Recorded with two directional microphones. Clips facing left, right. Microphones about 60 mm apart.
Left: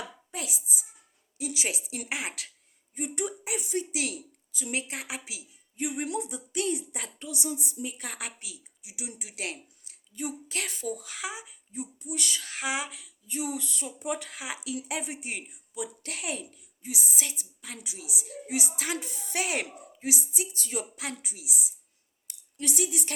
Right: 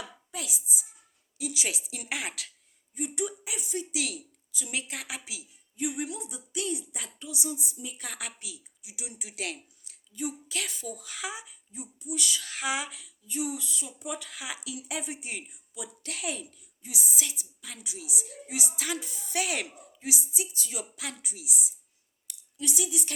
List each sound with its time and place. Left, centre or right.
0.3 s hands: left
1.4 s speech: left
2.0 s speech: centre
2.9 s speech: left
3.9 s speech: left
5.7 s speech: left
6.1 s speech: left
8.0 s speech: left
10.2 s speech: left
11.7 s speech: left
13.2 s speech: left
18.9 s speech: left
22.5 s speech: left